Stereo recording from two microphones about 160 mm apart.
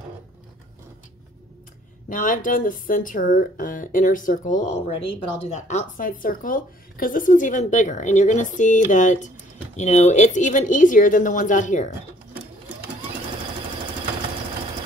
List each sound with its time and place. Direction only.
2.0 s speech: 55° left (ahead or behind)